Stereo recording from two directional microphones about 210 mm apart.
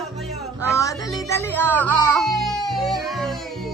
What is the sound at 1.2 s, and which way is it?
Music, 10° left (ahead or behind).